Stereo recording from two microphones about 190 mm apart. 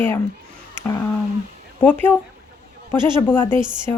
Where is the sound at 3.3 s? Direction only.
10° left (ahead or behind).